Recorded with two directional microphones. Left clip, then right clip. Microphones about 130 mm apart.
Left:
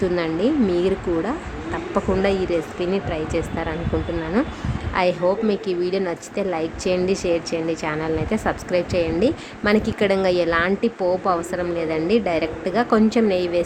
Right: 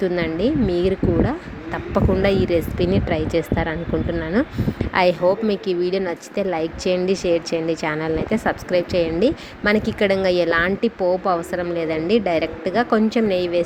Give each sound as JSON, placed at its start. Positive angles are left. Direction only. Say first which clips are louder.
{"t": 0.0, "sound": "speech", "louder": "even", "side_deg": -25}